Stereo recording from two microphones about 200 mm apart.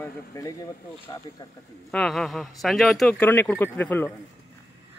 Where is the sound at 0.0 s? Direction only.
15° left (ahead or behind).